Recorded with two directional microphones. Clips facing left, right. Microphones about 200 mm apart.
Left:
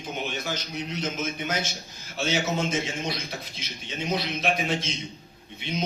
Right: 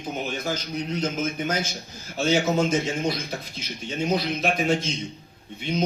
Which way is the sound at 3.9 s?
45° right (ahead or behind).